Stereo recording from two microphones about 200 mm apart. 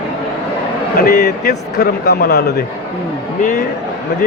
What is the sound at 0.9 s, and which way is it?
A man's voice, 50° left (ahead or behind).